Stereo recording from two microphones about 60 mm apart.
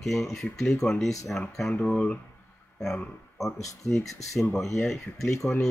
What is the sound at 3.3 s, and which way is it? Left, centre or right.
Speech, centre.